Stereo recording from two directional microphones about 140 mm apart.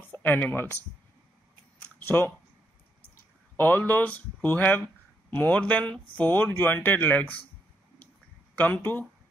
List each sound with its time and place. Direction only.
0.1 s speech: 10° left (ahead or behind)
1.8 s a sound: 15° left (ahead or behind)
3.5 s speech: 15° left (ahead or behind)
8.5 s speech: 10° left (ahead or behind)